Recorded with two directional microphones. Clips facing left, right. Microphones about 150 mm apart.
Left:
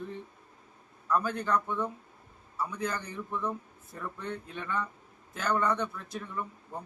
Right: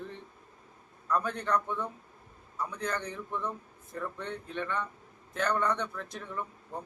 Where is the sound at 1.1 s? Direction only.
5° left (ahead or behind).